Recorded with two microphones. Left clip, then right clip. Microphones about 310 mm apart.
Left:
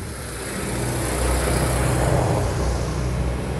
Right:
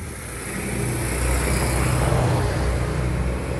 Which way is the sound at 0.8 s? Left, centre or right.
Left.